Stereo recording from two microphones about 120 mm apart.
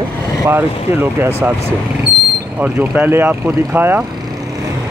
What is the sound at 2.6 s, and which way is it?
Speech, 15° right (ahead or behind).